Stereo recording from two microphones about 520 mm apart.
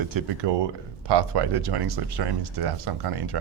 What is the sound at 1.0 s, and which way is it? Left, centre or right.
Speech, right.